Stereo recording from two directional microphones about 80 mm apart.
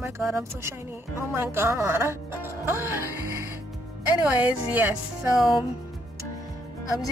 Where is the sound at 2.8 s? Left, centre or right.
Right.